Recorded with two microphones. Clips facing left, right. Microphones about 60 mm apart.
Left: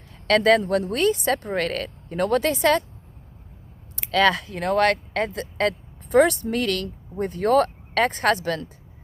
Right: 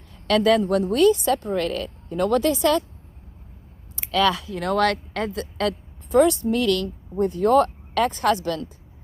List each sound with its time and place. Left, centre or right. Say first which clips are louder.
0.3 s a woman's voice: even; left
3.9 s a woman's voice: left 1 dB; left